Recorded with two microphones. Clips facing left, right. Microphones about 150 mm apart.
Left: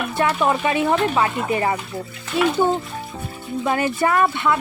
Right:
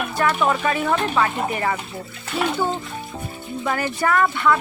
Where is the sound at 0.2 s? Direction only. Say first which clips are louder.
Left 1 dB; 25° left (ahead or behind).